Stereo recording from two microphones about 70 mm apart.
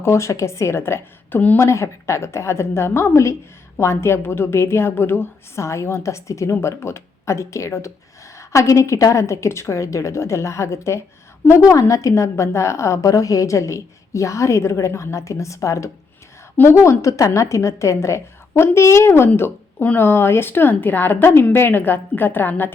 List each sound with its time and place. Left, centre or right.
0.0 s a woman's voice: left